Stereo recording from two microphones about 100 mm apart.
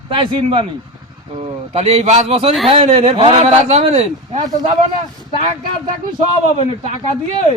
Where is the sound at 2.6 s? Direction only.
80° right.